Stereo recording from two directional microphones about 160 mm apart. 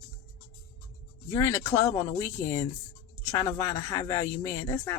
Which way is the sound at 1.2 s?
20° left (ahead or behind).